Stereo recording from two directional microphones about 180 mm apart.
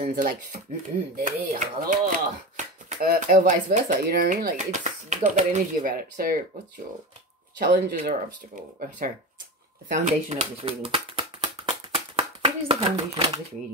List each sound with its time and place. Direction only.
0.0 s speech: 50° right (ahead or behind)
7.5 s speech: 50° right (ahead or behind)
10.6 s a sound: 30° right (ahead or behind)